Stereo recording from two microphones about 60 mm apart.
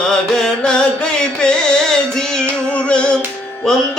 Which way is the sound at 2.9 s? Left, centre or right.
Centre.